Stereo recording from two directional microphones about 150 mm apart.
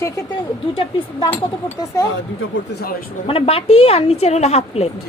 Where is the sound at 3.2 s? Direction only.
40° left (ahead or behind).